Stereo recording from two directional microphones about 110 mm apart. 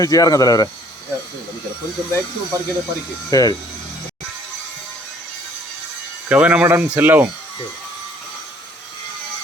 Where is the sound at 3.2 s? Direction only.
30° left (ahead or behind).